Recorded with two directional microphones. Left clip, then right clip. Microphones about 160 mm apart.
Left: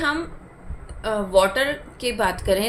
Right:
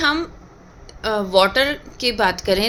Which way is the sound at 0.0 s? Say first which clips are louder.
Right 4 dB; 50° right (ahead or behind).